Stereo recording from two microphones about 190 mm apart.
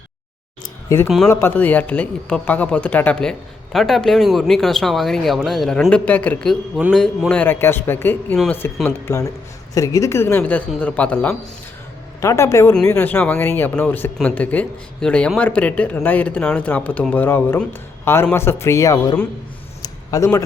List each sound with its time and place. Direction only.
1.0 s speech: centre (ahead or behind)
1.3 s speech: 10° left (ahead or behind)
19.8 s a sound: 15° left (ahead or behind)